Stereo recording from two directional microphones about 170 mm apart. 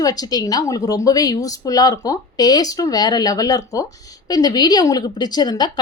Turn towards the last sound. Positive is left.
turn(degrees=25)  # may be behind; listen again after turning